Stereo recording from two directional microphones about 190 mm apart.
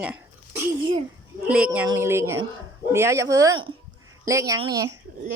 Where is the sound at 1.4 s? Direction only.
5° right (ahead or behind).